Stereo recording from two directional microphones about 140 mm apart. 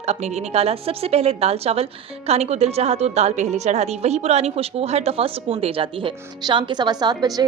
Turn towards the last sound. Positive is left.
turn(degrees=-30)  # may be behind; listen again after turning